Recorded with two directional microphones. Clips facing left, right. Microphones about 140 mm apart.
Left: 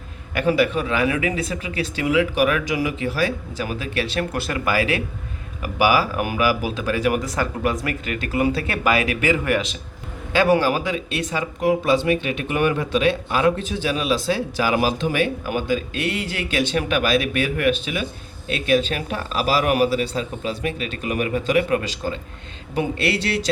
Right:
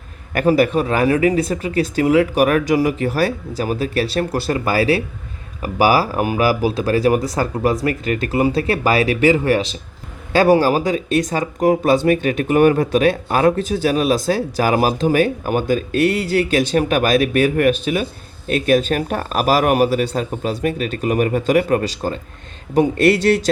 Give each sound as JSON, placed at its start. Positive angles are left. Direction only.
{"t": 0.3, "sound": "speech", "side_deg": -40}